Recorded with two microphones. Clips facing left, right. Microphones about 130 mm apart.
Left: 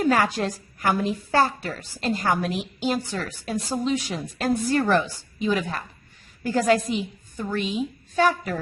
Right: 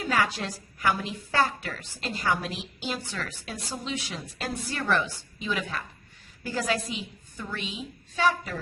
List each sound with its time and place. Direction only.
0.0 s a woman's voice: 45° left (ahead or behind)